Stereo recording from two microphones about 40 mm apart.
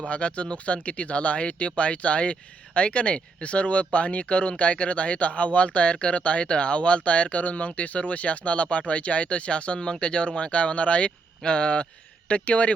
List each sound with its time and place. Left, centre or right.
0.0 s speech: left